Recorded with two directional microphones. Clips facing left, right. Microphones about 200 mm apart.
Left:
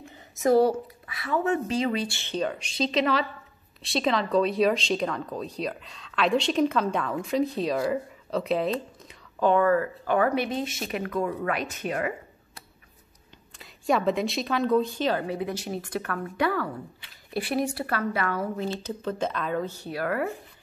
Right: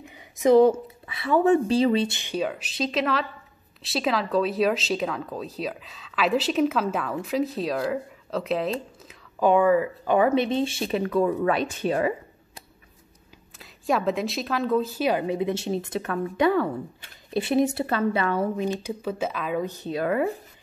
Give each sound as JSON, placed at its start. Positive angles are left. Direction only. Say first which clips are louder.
{"t": 0.1, "sound": "a sound", "louder": "right 4 dB", "side_deg": -20}
{"t": 1.0, "sound": "a woman's voice", "louder": "right 7 dB", "side_deg": -25}
{"t": 9.0, "sound": "speech", "louder": "right 3 dB", "side_deg": -10}
{"t": 13.6, "sound": "a woman's voice", "louder": "even", "side_deg": 0}
{"t": 18.6, "sound": "a woman's voice", "louder": "right 3 dB", "side_deg": -15}